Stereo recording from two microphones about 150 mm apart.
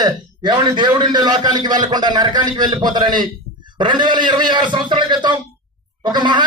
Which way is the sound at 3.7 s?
30° right (ahead or behind).